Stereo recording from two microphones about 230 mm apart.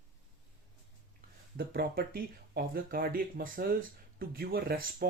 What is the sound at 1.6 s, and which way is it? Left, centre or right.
Speech, right.